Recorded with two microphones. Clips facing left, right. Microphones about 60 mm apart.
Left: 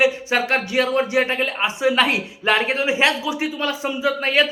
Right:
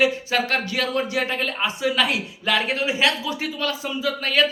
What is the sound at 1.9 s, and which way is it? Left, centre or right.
Speech, left.